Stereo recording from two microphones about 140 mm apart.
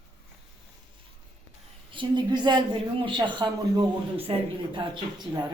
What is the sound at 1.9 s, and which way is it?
Speech, 35° right (ahead or behind).